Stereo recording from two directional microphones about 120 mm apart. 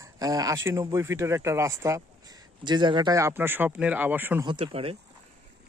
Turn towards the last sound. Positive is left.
turn(degrees=-55)  # may be behind; listen again after turning